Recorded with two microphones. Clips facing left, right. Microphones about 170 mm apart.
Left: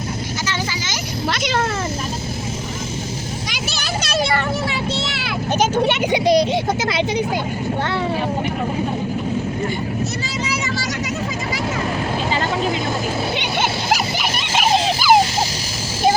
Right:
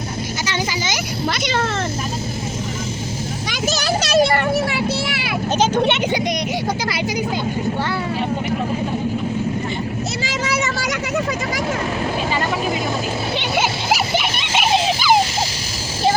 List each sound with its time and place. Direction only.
1.3 s speech: centre (ahead or behind)
6.1 s a child's voice: 30° left (ahead or behind)